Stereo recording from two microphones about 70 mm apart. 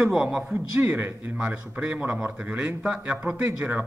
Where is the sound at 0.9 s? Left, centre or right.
Right.